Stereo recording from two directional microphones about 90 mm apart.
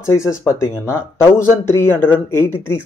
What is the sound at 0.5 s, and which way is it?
Speech, 30° left (ahead or behind).